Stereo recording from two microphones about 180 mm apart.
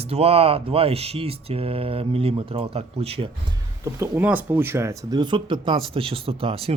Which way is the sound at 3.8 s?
15° right (ahead or behind).